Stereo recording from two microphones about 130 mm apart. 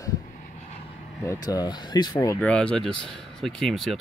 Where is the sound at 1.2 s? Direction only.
30° left (ahead or behind).